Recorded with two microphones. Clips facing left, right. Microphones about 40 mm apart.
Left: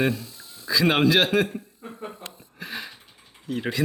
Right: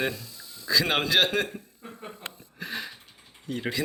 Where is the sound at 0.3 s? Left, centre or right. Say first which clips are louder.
Left 1 dB; left.